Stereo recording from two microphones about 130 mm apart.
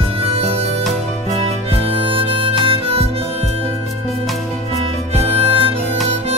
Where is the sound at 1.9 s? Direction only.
45° right (ahead or behind).